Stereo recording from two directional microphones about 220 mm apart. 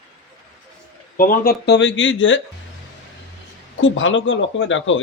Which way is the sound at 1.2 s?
40° left (ahead or behind).